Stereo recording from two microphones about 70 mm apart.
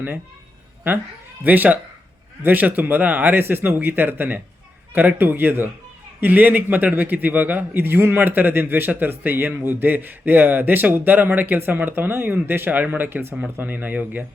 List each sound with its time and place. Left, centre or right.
1.5 s a man's voice: right